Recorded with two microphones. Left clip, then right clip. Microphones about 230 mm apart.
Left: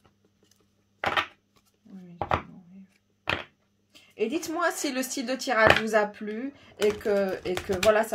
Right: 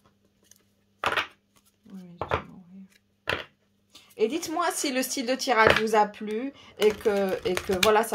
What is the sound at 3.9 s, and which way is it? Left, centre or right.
Speech, right.